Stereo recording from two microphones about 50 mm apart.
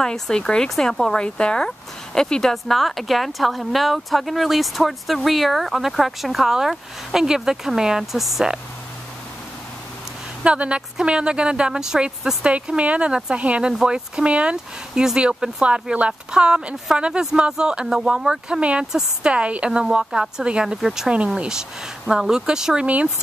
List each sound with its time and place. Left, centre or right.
0.0 s speech: centre
0.7 s speech: centre
1.1 s speech: centre
2.5 s speech: centre
10.4 s speech: right
12.4 s speech: right
18.6 s speech: right
18.9 s speech: centre
19.3 s speech: right